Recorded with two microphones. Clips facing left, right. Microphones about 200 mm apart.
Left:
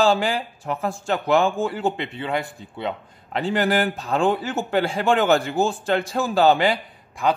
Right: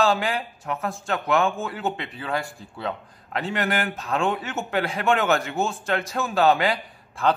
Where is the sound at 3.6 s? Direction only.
Centre (ahead or behind).